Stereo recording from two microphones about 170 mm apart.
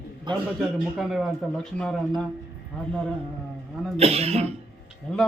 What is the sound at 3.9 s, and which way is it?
Speech, 35° right (ahead or behind).